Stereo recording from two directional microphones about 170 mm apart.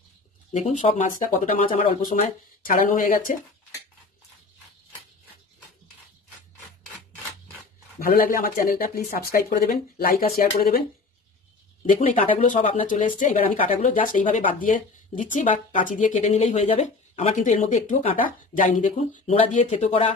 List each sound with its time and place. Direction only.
0.5 s speech: 40° left (ahead or behind)
8.0 s speech: 55° left (ahead or behind)
11.9 s speech: 50° left (ahead or behind)
12.4 s speech: 40° left (ahead or behind)